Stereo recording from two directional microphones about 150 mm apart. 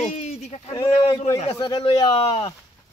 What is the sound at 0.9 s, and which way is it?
Speech, 40° left (ahead or behind).